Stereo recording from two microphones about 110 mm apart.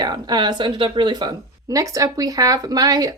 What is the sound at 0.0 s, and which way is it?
Speech, 40° right (ahead or behind).